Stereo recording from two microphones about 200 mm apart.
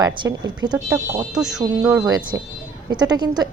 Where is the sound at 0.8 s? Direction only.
10° right (ahead or behind).